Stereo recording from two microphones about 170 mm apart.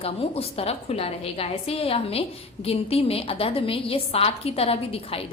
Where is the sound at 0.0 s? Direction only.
35° left (ahead or behind).